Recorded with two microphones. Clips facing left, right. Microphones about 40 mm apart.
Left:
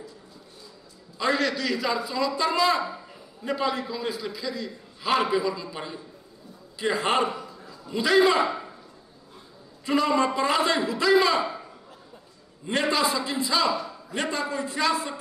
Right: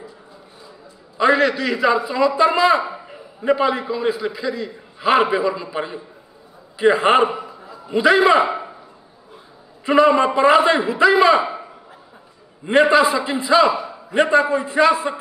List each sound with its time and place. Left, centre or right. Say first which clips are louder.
1.1 s a man's voice: right 9 dB; right
9.8 s a man's voice: right 8 dB; right